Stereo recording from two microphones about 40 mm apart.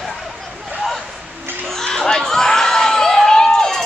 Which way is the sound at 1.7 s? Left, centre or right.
Centre.